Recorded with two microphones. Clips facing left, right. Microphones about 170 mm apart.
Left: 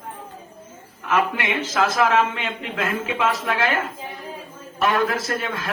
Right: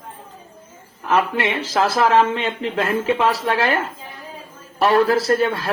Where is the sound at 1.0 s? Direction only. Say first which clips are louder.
Right 3 dB; 35° right (ahead or behind).